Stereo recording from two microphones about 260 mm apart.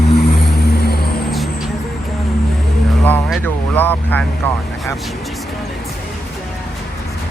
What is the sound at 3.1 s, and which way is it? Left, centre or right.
Speech, centre.